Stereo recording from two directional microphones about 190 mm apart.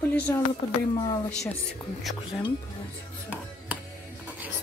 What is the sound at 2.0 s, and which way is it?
Speech, centre (ahead or behind).